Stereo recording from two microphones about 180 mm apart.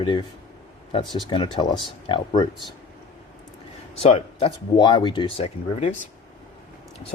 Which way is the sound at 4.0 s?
30° left (ahead or behind).